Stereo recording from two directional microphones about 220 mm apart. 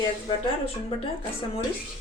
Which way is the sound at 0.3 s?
25° left (ahead or behind).